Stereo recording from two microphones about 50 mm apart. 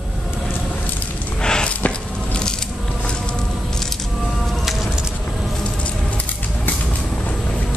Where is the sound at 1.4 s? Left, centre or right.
Centre.